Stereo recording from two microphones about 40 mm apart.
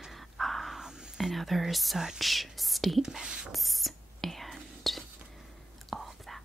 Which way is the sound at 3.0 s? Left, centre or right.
Centre.